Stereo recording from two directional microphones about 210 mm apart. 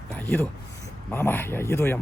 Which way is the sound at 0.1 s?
10° left (ahead or behind).